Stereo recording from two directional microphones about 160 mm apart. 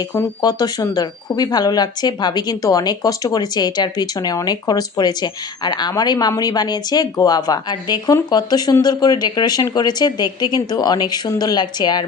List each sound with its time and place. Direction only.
0.1 s speech: 20° left (ahead or behind)